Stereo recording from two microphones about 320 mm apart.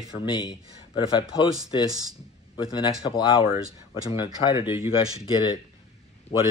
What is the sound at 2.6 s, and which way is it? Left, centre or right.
Speech, centre.